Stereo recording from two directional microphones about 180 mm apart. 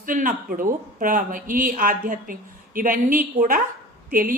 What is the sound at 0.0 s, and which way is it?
Speech, 50° right (ahead or behind).